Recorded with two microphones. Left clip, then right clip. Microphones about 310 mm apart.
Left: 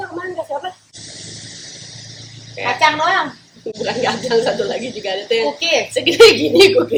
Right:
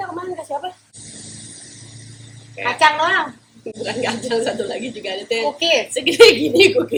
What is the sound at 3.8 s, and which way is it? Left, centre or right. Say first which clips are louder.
A woman's voice: left 4 dB; centre.